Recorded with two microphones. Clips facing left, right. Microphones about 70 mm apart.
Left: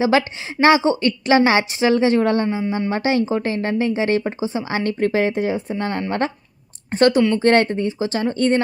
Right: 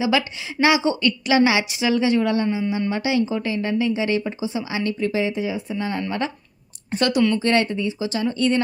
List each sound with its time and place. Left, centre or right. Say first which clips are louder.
0.0 s speech: left 4 dB; left
5.5 s speech: left 2 dB; left